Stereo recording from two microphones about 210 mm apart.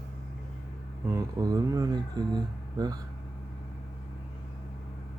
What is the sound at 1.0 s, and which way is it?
Speech, 15° right (ahead or behind).